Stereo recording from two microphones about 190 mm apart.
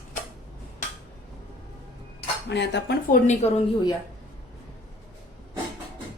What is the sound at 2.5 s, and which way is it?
Speech, 65° left (ahead or behind).